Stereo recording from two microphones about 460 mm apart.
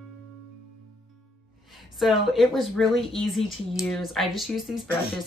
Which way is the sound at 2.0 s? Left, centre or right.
Centre.